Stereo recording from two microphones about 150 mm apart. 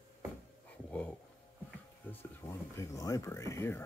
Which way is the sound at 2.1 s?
15° left (ahead or behind).